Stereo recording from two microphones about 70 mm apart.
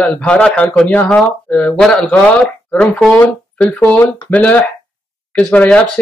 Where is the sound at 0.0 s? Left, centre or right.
Centre.